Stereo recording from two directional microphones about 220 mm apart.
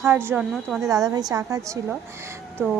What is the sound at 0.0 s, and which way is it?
Speech, 10° right (ahead or behind).